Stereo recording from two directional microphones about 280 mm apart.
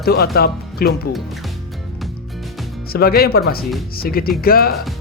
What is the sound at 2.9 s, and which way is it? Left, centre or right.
Speech, left.